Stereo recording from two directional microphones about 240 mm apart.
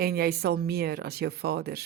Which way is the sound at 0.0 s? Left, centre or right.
Right.